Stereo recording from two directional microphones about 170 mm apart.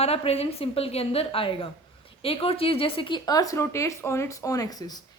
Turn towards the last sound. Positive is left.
turn(degrees=25)  # may be behind; listen again after turning